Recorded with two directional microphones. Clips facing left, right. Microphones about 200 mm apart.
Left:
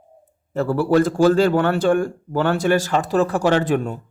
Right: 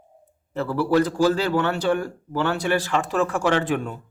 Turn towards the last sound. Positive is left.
turn(degrees=40)  # may be behind; listen again after turning